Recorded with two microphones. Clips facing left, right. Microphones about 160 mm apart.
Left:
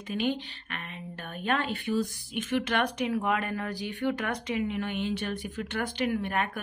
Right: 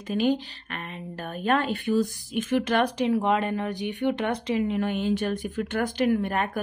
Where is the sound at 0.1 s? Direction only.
40° right (ahead or behind).